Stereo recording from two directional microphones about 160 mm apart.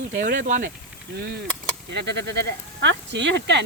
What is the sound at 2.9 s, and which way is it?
Speech, 90° right.